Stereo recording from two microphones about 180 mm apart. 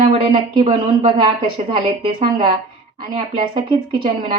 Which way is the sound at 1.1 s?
30° right (ahead or behind).